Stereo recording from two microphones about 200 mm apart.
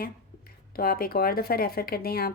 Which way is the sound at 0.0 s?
45° left (ahead or behind).